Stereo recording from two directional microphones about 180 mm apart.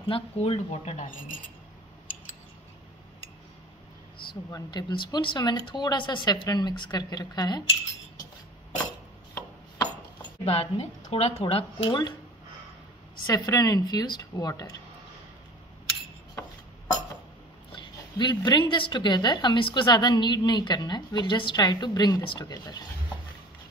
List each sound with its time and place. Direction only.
0.1 s speech: 35° left (ahead or behind)
4.3 s a woman's voice: 20° left (ahead or behind)
10.4 s speech: 35° left (ahead or behind)
13.3 s a woman's voice: 20° left (ahead or behind)
18.1 s a woman's voice: 20° left (ahead or behind)